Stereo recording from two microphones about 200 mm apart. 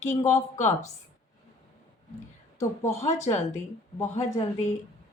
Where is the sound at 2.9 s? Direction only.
35° left (ahead or behind).